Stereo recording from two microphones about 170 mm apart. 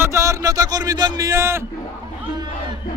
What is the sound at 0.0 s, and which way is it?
A man's voice, 15° right (ahead or behind).